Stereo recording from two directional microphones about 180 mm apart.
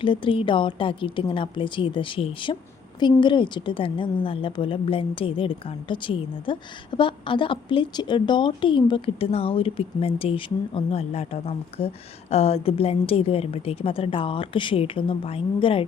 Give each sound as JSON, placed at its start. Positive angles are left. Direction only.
{"t": 0.0, "sound": "a woman's voice", "side_deg": 30}